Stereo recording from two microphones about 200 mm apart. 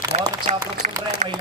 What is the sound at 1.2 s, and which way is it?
Speech, 40° right (ahead or behind).